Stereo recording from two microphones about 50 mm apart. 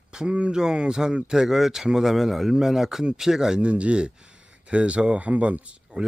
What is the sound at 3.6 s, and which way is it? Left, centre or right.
Speech, right.